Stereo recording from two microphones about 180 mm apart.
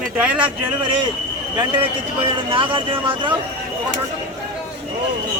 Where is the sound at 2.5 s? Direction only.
30° right (ahead or behind).